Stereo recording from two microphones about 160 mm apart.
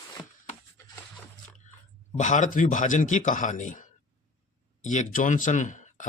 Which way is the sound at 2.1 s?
50° left (ahead or behind).